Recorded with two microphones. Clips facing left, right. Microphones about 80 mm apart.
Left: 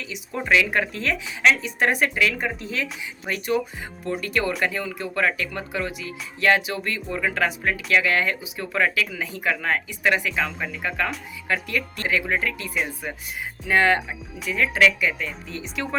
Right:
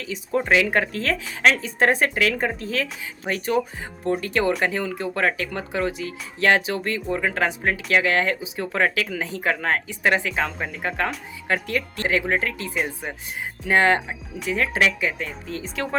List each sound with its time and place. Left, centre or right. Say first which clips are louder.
0.0 s speech: right 6 dB; right
1.8 s speech: right 3 dB; right